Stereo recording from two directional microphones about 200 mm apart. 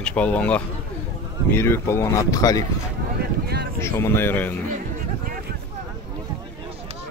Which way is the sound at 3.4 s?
55° right (ahead or behind).